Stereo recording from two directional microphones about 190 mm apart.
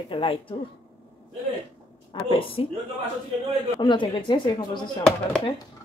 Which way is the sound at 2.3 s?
30° left (ahead or behind).